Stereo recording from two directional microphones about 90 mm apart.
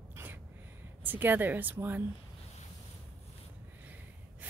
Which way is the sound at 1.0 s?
20° right (ahead or behind).